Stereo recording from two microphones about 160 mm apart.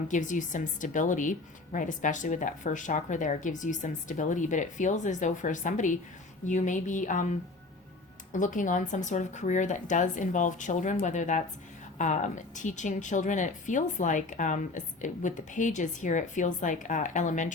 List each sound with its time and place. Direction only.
0.1 s a woman's voice: 50° left (ahead or behind)
8.3 s a woman's voice: 55° left (ahead or behind)